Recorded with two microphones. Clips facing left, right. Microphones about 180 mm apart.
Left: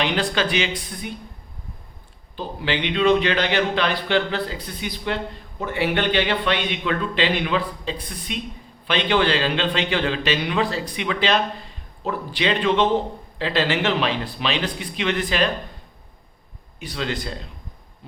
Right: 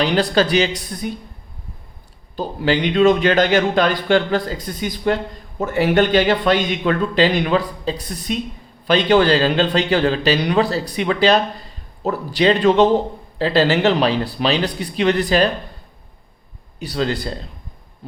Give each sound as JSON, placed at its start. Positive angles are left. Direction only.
{"t": 0.0, "sound": "a man's voice", "side_deg": -35}
{"t": 2.3, "sound": "a man's voice", "side_deg": -40}
{"t": 16.8, "sound": "a man's voice", "side_deg": -35}